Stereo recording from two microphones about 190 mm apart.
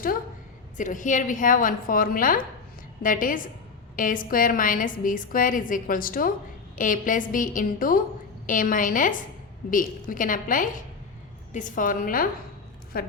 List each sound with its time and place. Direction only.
0.8 s a woman's voice: 45° left (ahead or behind)